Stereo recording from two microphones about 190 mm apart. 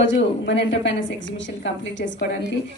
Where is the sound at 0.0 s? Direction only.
75° left (ahead or behind).